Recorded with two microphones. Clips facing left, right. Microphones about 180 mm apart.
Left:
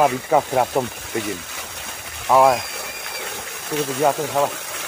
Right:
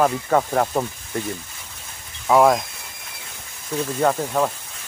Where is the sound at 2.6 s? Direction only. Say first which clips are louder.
Left 8 dB; 70° left (ahead or behind).